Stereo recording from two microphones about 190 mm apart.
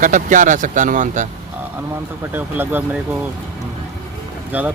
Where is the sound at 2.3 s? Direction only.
10° right (ahead or behind).